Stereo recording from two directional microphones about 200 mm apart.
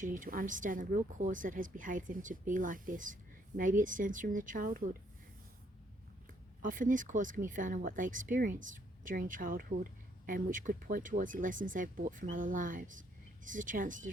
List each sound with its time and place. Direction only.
0.0 s speech: 40° right (ahead or behind)
6.6 s speech: 40° right (ahead or behind)